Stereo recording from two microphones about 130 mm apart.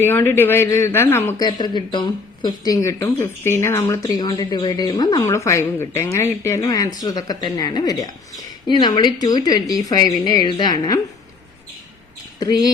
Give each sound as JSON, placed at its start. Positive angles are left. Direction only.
{"t": 0.0, "sound": "speech", "side_deg": 15}
{"t": 1.4, "sound": "speech", "side_deg": 35}
{"t": 12.4, "sound": "speech", "side_deg": 30}